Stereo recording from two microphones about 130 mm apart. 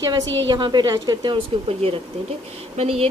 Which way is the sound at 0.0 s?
30° right (ahead or behind).